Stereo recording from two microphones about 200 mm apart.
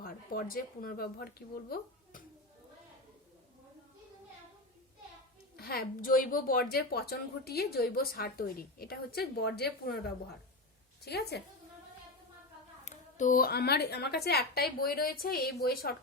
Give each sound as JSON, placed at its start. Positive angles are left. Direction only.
{"t": 0.0, "sound": "speech", "side_deg": 45}
{"t": 5.5, "sound": "a woman's voice", "side_deg": 50}
{"t": 11.0, "sound": "a woman's voice", "side_deg": 55}
{"t": 12.8, "sound": "a woman's voice", "side_deg": 40}